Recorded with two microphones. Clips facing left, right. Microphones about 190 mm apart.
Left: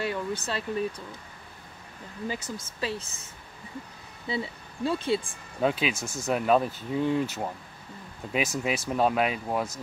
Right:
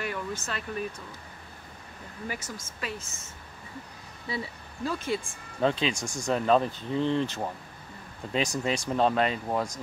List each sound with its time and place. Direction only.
0.0 s speech: 30° left (ahead or behind)
2.2 s speech: 35° left (ahead or behind)
4.3 s speech: 25° left (ahead or behind)
5.6 s speech: 5° left (ahead or behind)